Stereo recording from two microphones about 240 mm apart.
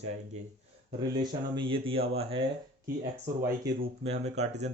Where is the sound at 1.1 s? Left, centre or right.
Centre.